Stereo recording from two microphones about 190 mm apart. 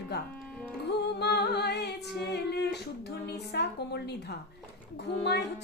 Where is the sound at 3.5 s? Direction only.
60° left (ahead or behind).